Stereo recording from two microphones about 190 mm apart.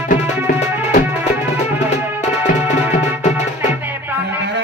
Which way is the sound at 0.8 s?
40° left (ahead or behind).